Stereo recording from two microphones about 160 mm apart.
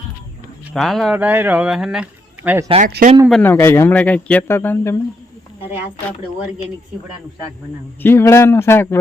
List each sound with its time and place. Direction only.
0.7 s speech: centre (ahead or behind)
1.1 s speech: 10° right (ahead or behind)
2.8 s speech: 60° right (ahead or behind)
3.4 s speech: 15° left (ahead or behind)
8.0 s speech: 15° left (ahead or behind)